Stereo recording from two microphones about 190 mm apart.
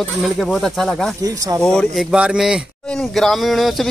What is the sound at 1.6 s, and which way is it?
Speech, centre (ahead or behind).